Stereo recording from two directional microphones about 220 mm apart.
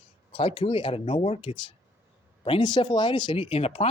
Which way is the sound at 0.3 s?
25° left (ahead or behind).